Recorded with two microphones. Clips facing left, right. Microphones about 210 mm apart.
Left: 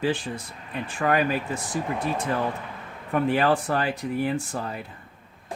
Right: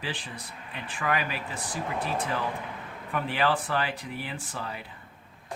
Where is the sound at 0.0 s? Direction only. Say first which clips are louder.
Left 10 dB; 45° left (ahead or behind).